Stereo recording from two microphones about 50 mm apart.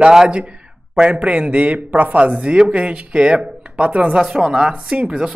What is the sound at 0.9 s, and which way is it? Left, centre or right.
Speech, right.